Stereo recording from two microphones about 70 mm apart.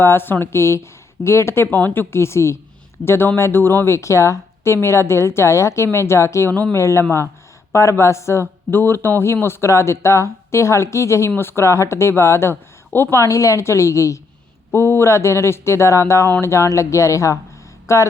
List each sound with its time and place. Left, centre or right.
0.0 s speech: left
1.6 s speech: left
6.5 s speech: centre
6.7 s speech: left
13.2 s a woman's voice: left
14.7 s a woman's voice: left